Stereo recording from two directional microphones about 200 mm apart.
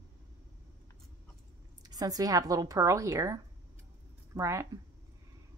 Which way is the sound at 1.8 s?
20° right (ahead or behind).